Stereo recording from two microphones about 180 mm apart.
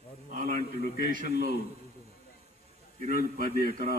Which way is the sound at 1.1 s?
55° right (ahead or behind).